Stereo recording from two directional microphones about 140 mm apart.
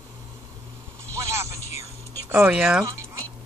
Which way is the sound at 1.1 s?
20° right (ahead or behind).